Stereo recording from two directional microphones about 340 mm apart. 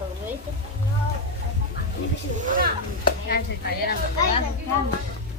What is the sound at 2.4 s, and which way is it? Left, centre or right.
Speech, right.